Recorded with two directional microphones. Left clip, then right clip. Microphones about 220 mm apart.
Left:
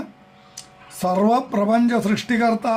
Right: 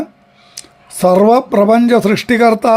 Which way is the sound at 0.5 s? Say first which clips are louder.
Right 7 dB; 45° right (ahead or behind).